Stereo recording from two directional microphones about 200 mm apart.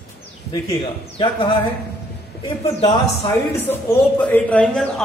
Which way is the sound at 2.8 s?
25° left (ahead or behind).